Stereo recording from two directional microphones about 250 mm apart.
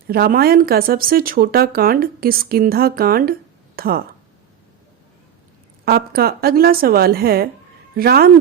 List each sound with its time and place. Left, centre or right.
0.1 s speech: right
5.8 s speech: right